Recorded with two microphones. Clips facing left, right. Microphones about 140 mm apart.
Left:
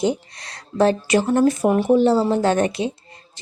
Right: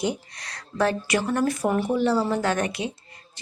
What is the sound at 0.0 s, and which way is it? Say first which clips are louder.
A woman's voice: left 6 dB; 25° left (ahead or behind).